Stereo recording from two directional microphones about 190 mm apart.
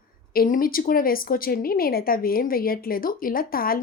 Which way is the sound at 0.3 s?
50° left (ahead or behind).